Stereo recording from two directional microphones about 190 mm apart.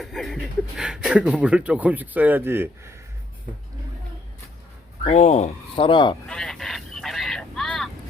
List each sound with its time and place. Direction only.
0.0 s speech: centre (ahead or behind)
5.0 s speech: 35° left (ahead or behind)
6.2 s vehicle: 5° left (ahead or behind)